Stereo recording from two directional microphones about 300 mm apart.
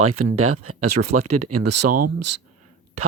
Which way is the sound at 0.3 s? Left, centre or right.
Right.